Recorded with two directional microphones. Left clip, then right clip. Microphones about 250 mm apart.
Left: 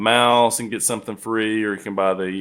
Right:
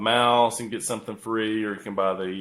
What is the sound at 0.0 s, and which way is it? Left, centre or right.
Speech, left.